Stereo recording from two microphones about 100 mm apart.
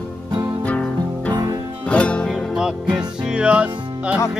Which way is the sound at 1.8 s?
10° left (ahead or behind).